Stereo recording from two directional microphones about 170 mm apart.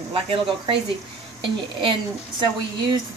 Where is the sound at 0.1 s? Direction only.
30° right (ahead or behind).